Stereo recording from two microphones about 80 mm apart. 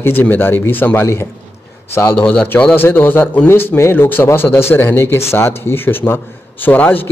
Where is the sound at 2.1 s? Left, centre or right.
Centre.